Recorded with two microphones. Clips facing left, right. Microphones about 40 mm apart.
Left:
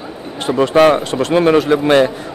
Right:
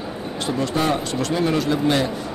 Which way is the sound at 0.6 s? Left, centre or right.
Left.